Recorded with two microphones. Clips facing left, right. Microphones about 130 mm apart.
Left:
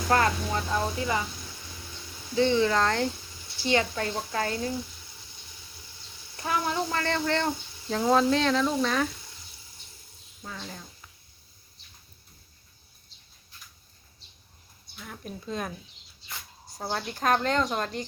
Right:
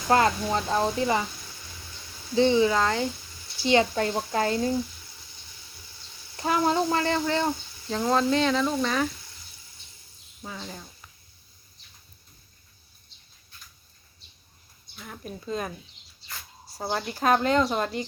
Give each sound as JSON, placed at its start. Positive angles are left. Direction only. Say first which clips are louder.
{"t": 0.1, "sound": "a woman's voice", "louder": "right 3 dB", "side_deg": -25}
{"t": 2.3, "sound": "a woman's voice", "louder": "right 3 dB", "side_deg": -20}
{"t": 2.6, "sound": "speech", "louder": "right 2 dB", "side_deg": -5}
{"t": 3.7, "sound": "a woman's voice", "louder": "right 4 dB", "side_deg": -25}
{"t": 6.3, "sound": "a woman's voice", "louder": "right 5 dB", "side_deg": -25}
{"t": 7.0, "sound": "speech", "louder": "right 2 dB", "side_deg": -10}
{"t": 10.4, "sound": "speech", "louder": "right 2 dB", "side_deg": -5}
{"t": 14.9, "sound": "speech", "louder": "right 1 dB", "side_deg": 0}
{"t": 16.7, "sound": "speech", "louder": "right 2 dB", "side_deg": -5}